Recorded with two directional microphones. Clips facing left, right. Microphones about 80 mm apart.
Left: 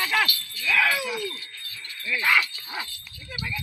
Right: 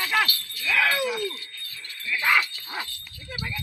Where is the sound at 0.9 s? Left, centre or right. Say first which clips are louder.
Right 3 dB; right.